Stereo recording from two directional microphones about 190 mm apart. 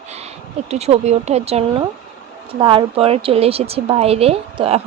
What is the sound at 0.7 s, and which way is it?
A woman's voice, 35° right (ahead or behind).